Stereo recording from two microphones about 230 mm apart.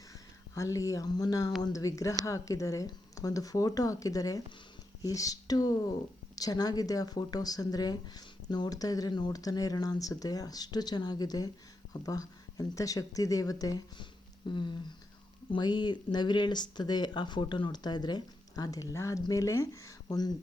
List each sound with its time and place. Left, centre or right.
0.5 s speech: centre